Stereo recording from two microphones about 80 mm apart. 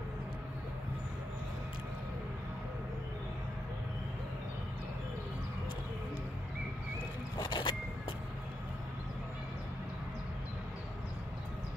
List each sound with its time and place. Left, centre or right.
7.4 s vehicle: left